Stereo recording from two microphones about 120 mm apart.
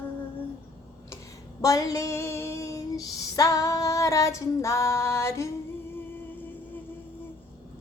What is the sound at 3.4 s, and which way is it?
Female singing, 30° left (ahead or behind).